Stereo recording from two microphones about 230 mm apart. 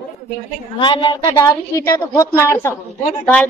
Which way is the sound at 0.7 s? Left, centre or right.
Left.